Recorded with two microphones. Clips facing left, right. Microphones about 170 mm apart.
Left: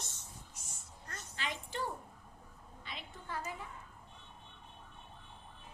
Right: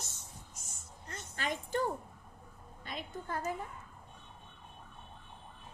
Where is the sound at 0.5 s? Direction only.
45° right (ahead or behind).